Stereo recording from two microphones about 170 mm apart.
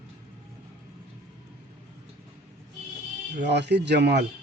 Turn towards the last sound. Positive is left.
turn(degrees=-75)  # may be behind; listen again after turning